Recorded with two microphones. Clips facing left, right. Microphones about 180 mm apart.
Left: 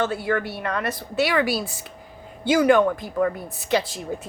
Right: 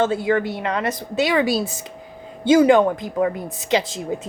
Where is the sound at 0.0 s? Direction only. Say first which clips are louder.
Right 5 dB; 20° right (ahead or behind).